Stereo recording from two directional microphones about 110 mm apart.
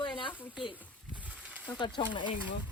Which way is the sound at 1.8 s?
50° left (ahead or behind).